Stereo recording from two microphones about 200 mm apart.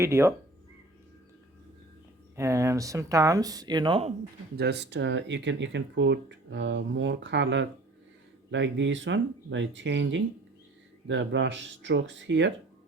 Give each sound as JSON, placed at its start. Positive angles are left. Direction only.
{"t": 0.0, "sound": "speech", "side_deg": -15}
{"t": 2.3, "sound": "speech", "side_deg": -15}
{"t": 4.5, "sound": "speech", "side_deg": -55}